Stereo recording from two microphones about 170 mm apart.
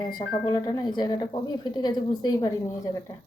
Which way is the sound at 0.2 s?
25° left (ahead or behind).